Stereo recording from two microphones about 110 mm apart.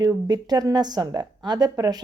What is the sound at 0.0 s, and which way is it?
A woman's voice, 35° right (ahead or behind).